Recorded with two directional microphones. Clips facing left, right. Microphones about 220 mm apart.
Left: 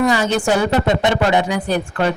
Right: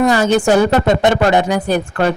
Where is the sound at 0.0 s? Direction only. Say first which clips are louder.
Right 4 dB; 45° right (ahead or behind).